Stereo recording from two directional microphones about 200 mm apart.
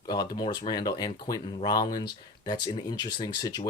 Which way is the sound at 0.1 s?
20° left (ahead or behind).